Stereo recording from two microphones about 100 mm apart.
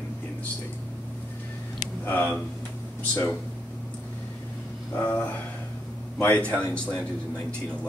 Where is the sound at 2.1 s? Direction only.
20° left (ahead or behind).